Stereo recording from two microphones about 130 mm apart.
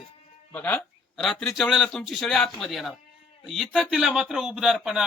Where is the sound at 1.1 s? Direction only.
Centre (ahead or behind).